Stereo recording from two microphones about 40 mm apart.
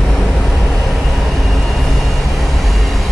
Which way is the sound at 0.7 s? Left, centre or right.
Centre.